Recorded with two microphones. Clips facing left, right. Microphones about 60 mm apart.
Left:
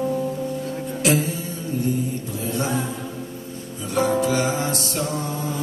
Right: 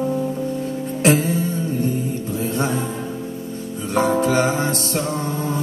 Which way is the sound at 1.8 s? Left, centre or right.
Right.